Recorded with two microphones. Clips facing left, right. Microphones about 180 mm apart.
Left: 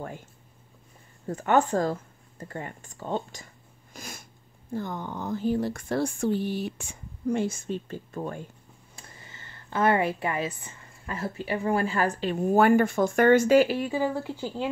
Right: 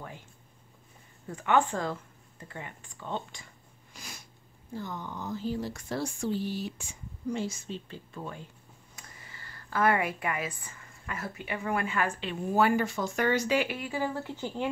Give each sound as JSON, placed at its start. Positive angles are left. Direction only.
{"t": 1.2, "sound": "speech", "side_deg": 40}
{"t": 3.9, "sound": "a sound", "side_deg": 50}
{"t": 4.7, "sound": "speech", "side_deg": 55}
{"t": 8.9, "sound": "speech", "side_deg": 25}
{"t": 13.7, "sound": "speech", "side_deg": 25}